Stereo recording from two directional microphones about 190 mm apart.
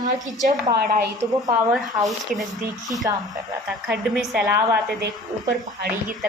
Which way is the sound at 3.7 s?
5° right (ahead or behind).